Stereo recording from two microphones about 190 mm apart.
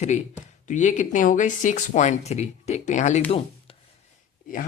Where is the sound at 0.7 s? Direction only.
40° left (ahead or behind).